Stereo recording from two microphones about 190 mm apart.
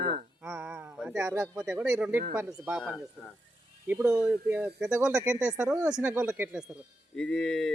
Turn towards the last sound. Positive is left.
turn(degrees=5)  # may be behind; listen again after turning